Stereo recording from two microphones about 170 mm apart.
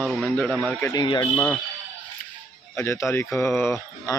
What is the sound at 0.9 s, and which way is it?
Speech, 25° left (ahead or behind).